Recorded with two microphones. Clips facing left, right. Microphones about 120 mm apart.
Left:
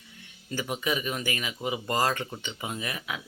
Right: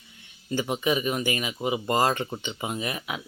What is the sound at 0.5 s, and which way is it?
Speech, 25° right (ahead or behind).